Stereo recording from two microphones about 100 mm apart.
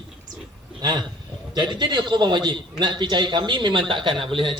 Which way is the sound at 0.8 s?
45° right (ahead or behind).